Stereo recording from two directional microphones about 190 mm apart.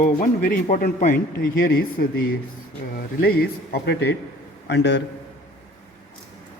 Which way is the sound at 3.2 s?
55° left (ahead or behind).